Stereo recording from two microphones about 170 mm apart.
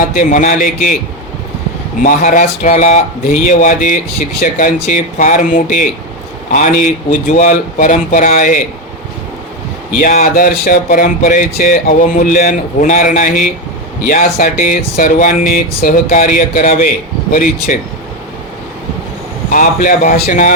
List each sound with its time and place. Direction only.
0.1 s speech: 50° left (ahead or behind)
2.0 s speech: 50° left (ahead or behind)
10.0 s speech: 50° left (ahead or behind)
19.5 s speech: 50° left (ahead or behind)